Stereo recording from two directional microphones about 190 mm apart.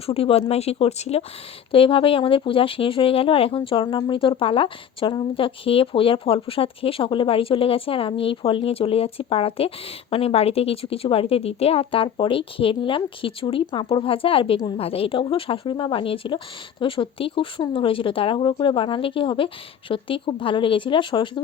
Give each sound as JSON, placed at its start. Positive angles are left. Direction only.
{"t": 0.0, "sound": "speech", "side_deg": 30}